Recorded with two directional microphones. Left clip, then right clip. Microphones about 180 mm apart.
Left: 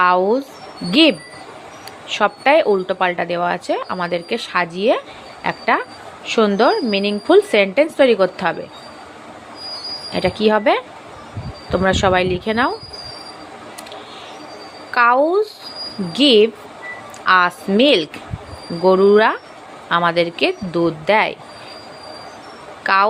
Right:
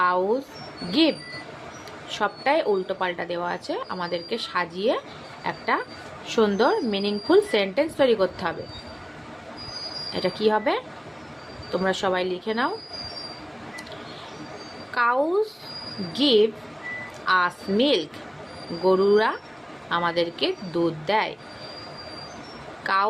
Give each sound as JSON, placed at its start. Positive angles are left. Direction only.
{"t": 0.0, "sound": "a woman's voice", "side_deg": 25}
{"t": 10.1, "sound": "a woman's voice", "side_deg": 25}
{"t": 14.9, "sound": "a woman's voice", "side_deg": 25}
{"t": 22.8, "sound": "speech", "side_deg": 25}